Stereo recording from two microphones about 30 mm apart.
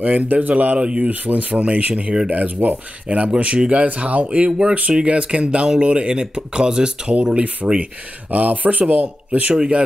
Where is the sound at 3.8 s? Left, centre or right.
Right.